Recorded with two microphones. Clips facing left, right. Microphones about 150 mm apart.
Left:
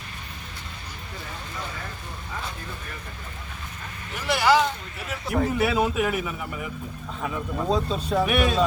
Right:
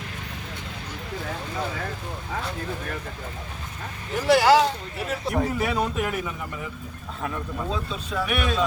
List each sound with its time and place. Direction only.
4.1 s speech: 35° right (ahead or behind)
5.5 s speech: 5° left (ahead or behind)
7.7 s speech: 35° left (ahead or behind)